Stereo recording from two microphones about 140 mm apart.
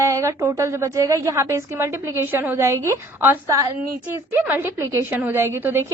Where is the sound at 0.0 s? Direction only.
20° right (ahead or behind).